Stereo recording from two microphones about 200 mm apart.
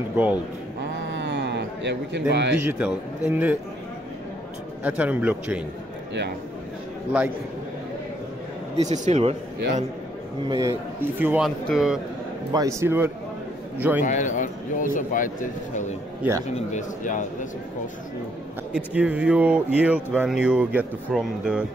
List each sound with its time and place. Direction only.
0.1 s a man's voice: 10° right (ahead or behind)
1.0 s a sound: 65° right (ahead or behind)
2.3 s speech: 60° right (ahead or behind)
2.6 s a man's voice: 10° right (ahead or behind)
4.8 s a man's voice: 5° right (ahead or behind)
8.7 s speech: 35° right (ahead or behind)
10.5 s a man's voice: 15° right (ahead or behind)
12.5 s a man's voice: 15° right (ahead or behind)
14.0 s speech: 40° left (ahead or behind)
16.2 s a man's voice: 15° right (ahead or behind)
16.5 s speech: 40° left (ahead or behind)
18.9 s a man's voice: 5° right (ahead or behind)